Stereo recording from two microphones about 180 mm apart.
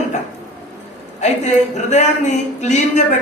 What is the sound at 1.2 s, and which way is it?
A man's voice, 40° left (ahead or behind).